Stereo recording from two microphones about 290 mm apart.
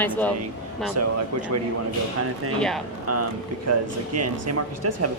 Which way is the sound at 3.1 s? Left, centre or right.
Right.